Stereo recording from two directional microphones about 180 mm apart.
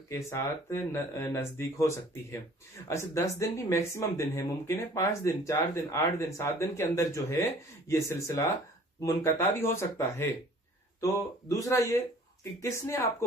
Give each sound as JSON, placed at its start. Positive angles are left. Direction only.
{"t": 0.1, "sound": "speech", "side_deg": 15}